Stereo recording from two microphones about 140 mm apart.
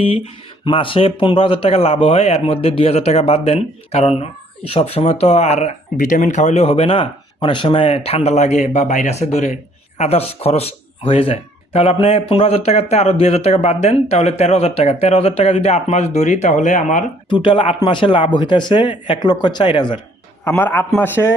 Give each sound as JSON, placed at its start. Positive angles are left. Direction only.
{"t": 0.6, "sound": "speech", "side_deg": 40}
{"t": 6.0, "sound": "speech", "side_deg": 65}
{"t": 17.2, "sound": "speech", "side_deg": 35}
{"t": 20.5, "sound": "a man's voice", "side_deg": 15}